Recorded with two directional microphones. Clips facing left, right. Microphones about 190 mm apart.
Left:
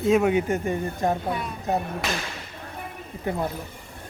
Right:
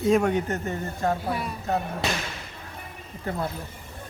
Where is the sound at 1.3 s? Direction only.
5° right (ahead or behind).